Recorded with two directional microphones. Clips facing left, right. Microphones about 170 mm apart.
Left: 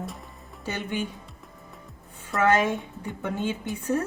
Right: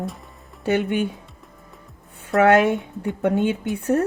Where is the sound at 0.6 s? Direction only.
65° right (ahead or behind).